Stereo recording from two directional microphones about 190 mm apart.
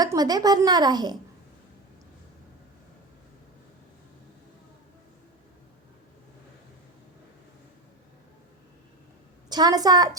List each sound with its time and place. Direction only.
0.0 s a woman's voice: 20° right (ahead or behind)
9.5 s a woman's voice: 20° right (ahead or behind)